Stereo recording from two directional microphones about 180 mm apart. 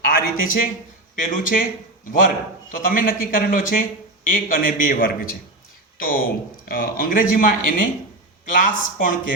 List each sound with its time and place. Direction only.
0.0 s speech: 55° left (ahead or behind)
2.7 s speech: 50° left (ahead or behind)